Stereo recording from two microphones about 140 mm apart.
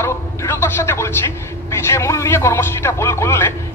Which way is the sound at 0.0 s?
20° left (ahead or behind).